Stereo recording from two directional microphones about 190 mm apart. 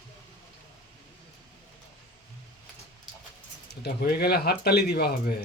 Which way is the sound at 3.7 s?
55° left (ahead or behind).